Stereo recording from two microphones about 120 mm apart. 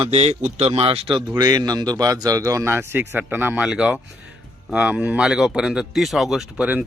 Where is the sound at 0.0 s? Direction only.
60° right (ahead or behind).